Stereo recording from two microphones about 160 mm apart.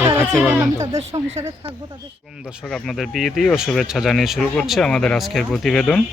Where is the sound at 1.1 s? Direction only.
35° right (ahead or behind).